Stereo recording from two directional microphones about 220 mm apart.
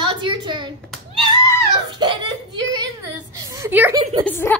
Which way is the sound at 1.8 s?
20° right (ahead or behind).